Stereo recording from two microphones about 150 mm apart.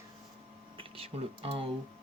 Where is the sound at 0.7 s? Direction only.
40° right (ahead or behind).